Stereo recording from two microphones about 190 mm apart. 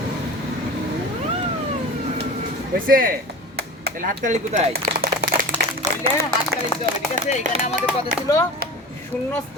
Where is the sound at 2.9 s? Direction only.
50° right (ahead or behind).